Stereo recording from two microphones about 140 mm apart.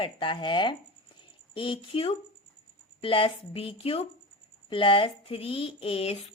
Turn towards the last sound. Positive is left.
turn(degrees=45)  # may be behind; listen again after turning